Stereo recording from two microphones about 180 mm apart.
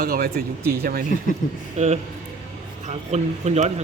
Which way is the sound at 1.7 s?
40° right (ahead or behind).